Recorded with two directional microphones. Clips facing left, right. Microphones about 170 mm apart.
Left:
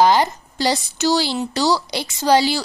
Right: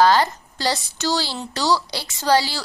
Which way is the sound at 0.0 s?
15° left (ahead or behind).